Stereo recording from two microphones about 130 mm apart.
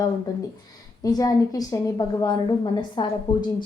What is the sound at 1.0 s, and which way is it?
A woman's voice, 30° left (ahead or behind).